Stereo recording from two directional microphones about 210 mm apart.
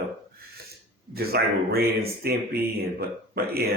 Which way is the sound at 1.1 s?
45° right (ahead or behind).